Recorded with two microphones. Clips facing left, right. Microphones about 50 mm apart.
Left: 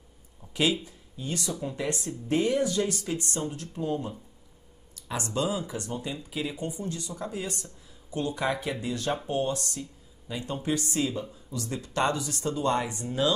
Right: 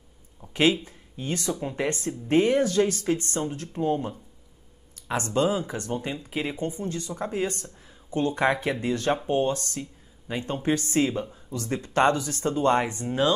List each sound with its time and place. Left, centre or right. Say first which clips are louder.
0.5 s speech: right 4 dB; right